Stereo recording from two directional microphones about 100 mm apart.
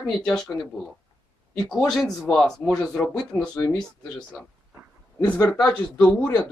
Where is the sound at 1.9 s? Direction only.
5° left (ahead or behind).